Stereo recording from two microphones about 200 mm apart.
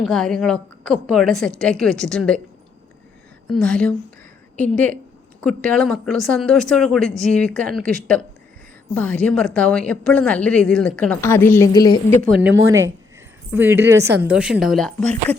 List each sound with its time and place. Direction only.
0.0 s a woman's voice: centre (ahead or behind)
3.4 s a woman's voice: 5° left (ahead or behind); by 11.9 s 20° left (ahead or behind)
12.5 s speech: 75° right (ahead or behind)
13.5 s a woman's voice: 10° right (ahead or behind); by 15.4 s 5° left (ahead or behind)